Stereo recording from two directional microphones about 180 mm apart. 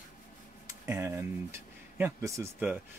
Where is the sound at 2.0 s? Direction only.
15° right (ahead or behind).